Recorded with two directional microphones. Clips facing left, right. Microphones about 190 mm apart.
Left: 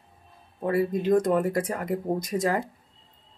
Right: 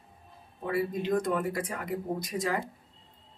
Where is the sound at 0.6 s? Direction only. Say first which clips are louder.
Left 5 dB; 45° left (ahead or behind).